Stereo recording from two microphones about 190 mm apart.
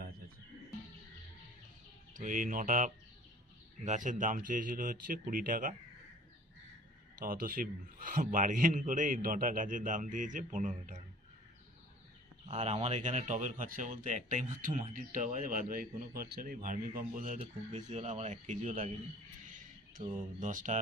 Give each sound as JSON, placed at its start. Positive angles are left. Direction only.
{"t": 2.1, "sound": "speech", "side_deg": -45}
{"t": 7.2, "sound": "speech", "side_deg": -50}
{"t": 12.5, "sound": "speech", "side_deg": -35}
{"t": 19.9, "sound": "speech", "side_deg": -40}